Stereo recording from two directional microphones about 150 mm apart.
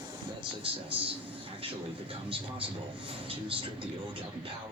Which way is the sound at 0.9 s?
35° right (ahead or behind).